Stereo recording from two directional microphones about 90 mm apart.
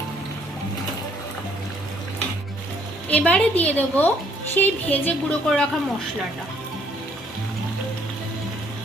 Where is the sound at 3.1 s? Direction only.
15° left (ahead or behind).